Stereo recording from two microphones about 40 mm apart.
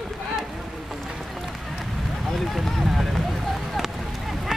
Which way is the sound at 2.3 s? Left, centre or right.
Centre.